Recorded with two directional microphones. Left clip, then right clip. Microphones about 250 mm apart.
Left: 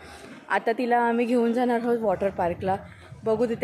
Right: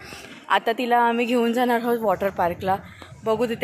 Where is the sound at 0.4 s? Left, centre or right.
Centre.